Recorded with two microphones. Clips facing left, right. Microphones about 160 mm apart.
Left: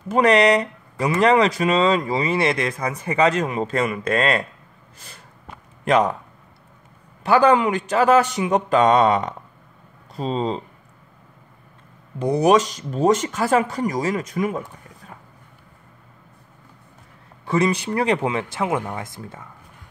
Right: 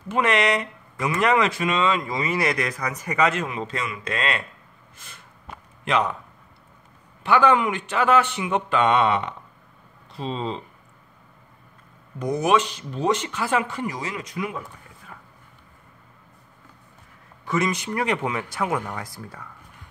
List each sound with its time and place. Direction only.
0.1 s speech: 35° left (ahead or behind)
4.9 s snort: 35° left (ahead or behind)
5.9 s speech: 45° left (ahead or behind)
7.2 s speech: 35° left (ahead or behind)
12.2 s speech: 35° left (ahead or behind)
15.0 s a sound: 35° left (ahead or behind)
17.5 s speech: 30° left (ahead or behind)